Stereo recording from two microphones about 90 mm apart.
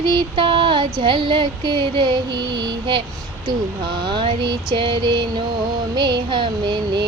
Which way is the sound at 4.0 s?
65° right (ahead or behind).